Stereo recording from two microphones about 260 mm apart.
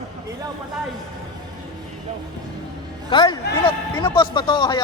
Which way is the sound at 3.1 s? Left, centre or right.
Centre.